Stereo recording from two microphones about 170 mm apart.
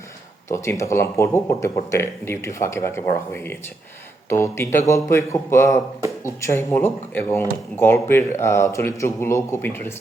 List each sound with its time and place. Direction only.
0.5 s a man's voice: 15° left (ahead or behind)